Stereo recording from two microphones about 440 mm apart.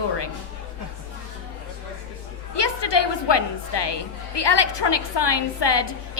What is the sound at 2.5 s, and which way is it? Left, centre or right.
A woman's voice, left.